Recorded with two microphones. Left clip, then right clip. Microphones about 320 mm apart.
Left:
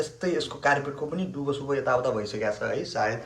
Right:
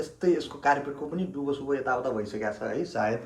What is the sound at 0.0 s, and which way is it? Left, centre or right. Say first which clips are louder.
Speech: right 1 dB; centre.